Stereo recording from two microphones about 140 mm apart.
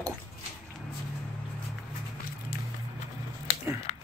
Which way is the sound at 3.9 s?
50° left (ahead or behind).